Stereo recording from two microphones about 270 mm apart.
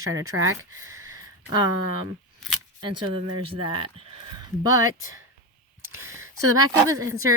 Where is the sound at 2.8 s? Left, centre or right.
Centre.